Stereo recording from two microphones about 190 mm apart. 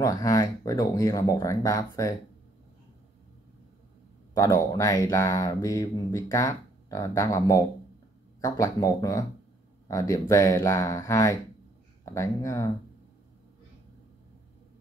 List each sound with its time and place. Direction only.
0.0 s speech: 20° left (ahead or behind)
4.4 s speech: 15° left (ahead or behind)